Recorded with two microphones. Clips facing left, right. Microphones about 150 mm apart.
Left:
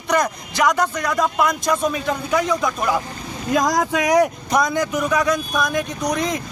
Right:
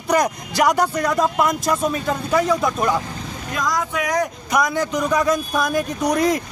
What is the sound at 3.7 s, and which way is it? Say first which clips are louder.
Speech: even; 90° left.